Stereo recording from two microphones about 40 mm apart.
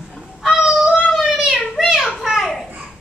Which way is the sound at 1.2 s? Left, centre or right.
Centre.